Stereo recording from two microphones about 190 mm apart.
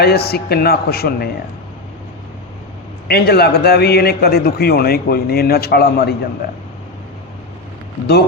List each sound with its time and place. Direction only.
0.0 s a man's voice: 55° left (ahead or behind)
3.1 s a man's voice: 55° left (ahead or behind)